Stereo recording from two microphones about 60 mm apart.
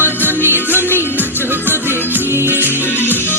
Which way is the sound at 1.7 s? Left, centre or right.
Right.